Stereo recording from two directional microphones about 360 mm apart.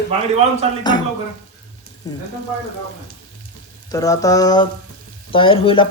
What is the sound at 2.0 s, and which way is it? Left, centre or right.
Speech, centre.